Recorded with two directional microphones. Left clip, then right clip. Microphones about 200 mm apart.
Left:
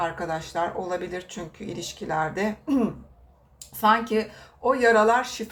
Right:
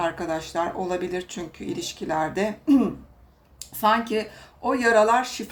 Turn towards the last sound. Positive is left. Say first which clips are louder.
# right 1 dB
turn(degrees=-25)  # may be behind; listen again after turning